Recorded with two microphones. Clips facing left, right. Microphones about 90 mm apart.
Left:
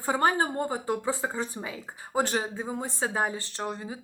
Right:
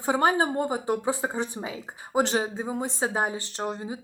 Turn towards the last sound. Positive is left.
turn(degrees=-20)  # may be behind; listen again after turning